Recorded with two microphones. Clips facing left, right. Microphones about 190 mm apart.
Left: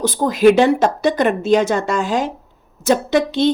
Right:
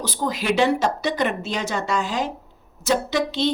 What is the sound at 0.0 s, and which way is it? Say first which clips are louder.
A woman's voice: left 13 dB; 50° left (ahead or behind).